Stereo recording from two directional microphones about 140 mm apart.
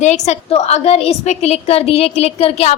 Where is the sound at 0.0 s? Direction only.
55° left (ahead or behind).